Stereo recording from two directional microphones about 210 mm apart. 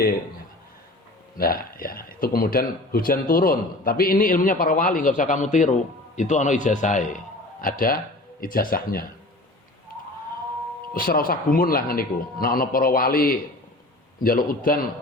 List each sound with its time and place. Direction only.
1.4 s a man's voice: 45° left (ahead or behind)
10.9 s speech: 45° left (ahead or behind)